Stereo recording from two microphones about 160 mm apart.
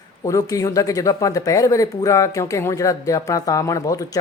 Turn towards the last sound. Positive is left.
turn(degrees=20)  # may be behind; listen again after turning